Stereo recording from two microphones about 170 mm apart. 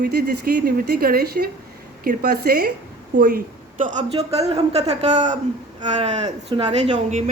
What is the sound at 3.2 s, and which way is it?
A man's voice, 50° right (ahead or behind).